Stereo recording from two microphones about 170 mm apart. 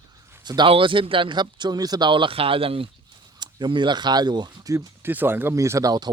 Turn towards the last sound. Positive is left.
turn(degrees=-25)  # may be behind; listen again after turning